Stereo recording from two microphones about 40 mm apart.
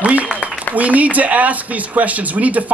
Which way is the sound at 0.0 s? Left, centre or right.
Right.